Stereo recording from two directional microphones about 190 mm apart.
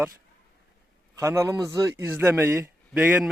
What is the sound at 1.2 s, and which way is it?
A man's voice, 15° right (ahead or behind).